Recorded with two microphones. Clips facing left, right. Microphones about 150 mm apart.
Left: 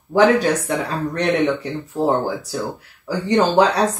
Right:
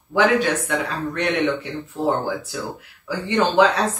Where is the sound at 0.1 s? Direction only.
40° left (ahead or behind).